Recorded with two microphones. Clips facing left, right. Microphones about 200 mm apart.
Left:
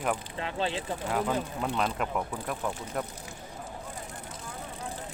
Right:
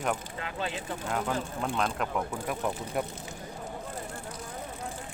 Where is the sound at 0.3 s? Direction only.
30° left (ahead or behind).